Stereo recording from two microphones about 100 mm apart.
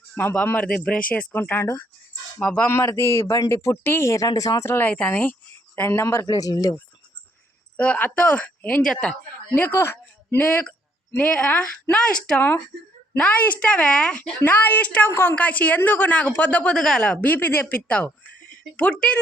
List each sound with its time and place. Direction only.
0.2 s speech: 20° left (ahead or behind)
2.6 s speech: 25° left (ahead or behind)
4.3 s speech: 40° left (ahead or behind)
4.7 s speech: 15° left (ahead or behind)
6.2 s speech: 40° left (ahead or behind)
7.8 s speech: 15° left (ahead or behind)
9.6 s speech: 25° left (ahead or behind)